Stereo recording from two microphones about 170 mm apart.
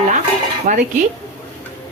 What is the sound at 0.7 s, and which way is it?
Speech, 50° right (ahead or behind).